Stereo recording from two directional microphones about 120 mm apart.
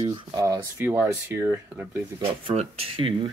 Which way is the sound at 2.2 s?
45° right (ahead or behind).